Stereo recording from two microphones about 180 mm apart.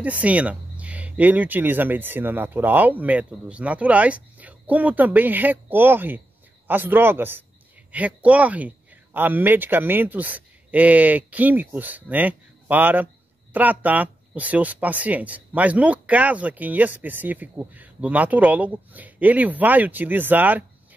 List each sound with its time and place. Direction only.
0.0 s speech: 10° right (ahead or behind)